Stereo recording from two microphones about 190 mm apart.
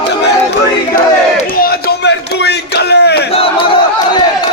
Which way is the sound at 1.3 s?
50° left (ahead or behind).